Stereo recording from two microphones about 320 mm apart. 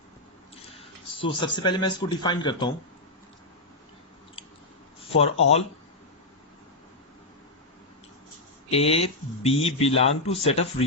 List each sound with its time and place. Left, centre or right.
0.7 s speech: centre
4.4 s biting: centre
4.9 s a sound: centre
8.7 s speech: centre